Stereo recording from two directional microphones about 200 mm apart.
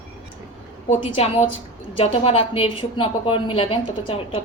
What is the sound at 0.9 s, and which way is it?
A woman's voice, 30° left (ahead or behind).